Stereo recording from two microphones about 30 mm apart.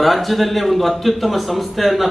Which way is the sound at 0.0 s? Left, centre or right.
Centre.